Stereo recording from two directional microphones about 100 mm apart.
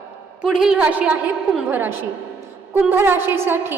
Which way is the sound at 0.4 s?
5° right (ahead or behind).